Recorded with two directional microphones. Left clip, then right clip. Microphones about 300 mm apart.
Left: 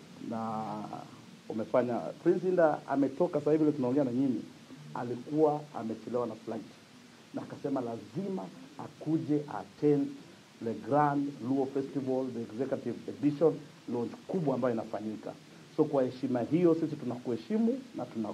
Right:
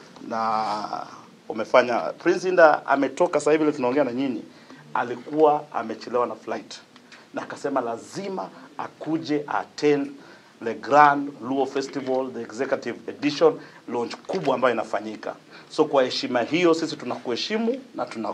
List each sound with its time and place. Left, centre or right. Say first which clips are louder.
0.3 s speech: right 13 dB; centre
16.0 s speech: right 9 dB; centre